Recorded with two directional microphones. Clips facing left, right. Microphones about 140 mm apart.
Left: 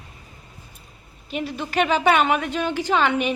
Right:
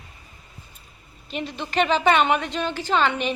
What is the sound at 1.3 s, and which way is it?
A woman's voice, 10° left (ahead or behind).